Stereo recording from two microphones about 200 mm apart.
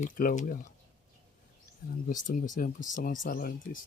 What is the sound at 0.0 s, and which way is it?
Speech, 40° left (ahead or behind).